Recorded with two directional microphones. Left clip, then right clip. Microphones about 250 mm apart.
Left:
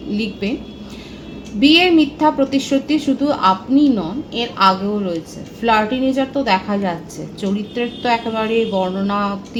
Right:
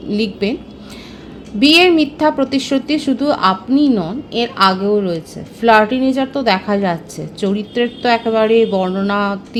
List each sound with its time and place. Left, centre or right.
0.1 s a woman's voice: right
1.5 s a woman's voice: right